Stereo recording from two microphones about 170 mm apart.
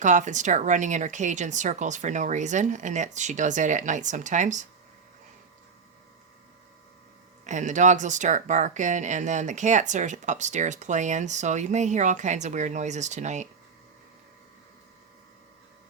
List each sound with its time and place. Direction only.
0.0 s speech: 45° right (ahead or behind)
7.4 s speech: 45° right (ahead or behind)